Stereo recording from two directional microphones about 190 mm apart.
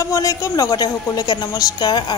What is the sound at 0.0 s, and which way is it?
A woman's voice, 15° left (ahead or behind).